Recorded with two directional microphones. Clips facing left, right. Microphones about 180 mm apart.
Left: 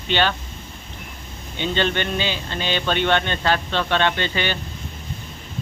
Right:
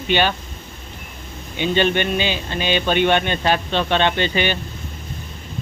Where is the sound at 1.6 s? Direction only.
15° right (ahead or behind).